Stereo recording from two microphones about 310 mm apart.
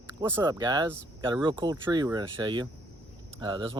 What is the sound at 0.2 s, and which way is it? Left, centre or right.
Speech, centre.